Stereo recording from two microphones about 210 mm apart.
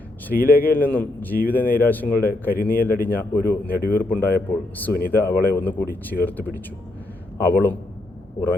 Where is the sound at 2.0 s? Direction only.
45° left (ahead or behind).